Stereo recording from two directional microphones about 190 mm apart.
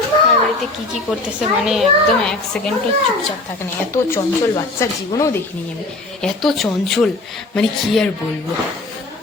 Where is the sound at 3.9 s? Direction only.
15° left (ahead or behind).